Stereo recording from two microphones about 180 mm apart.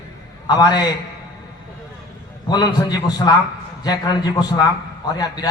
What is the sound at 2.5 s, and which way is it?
A man's voice, 20° left (ahead or behind).